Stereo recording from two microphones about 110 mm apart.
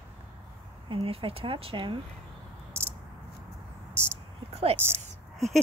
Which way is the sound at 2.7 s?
25° right (ahead or behind).